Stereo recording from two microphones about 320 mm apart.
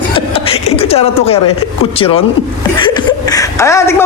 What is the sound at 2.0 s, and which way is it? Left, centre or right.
A man's voice, centre.